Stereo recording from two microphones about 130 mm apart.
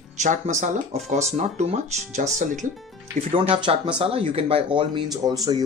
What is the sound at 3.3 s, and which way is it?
Speech, 45° right (ahead or behind).